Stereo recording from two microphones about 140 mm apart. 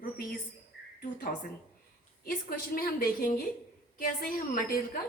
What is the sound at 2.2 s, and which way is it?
A woman's voice, 90° left.